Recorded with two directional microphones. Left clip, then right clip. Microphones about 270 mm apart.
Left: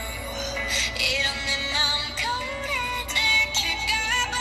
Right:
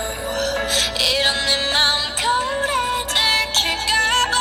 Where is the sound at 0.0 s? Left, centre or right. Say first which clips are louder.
Right 8 dB; right.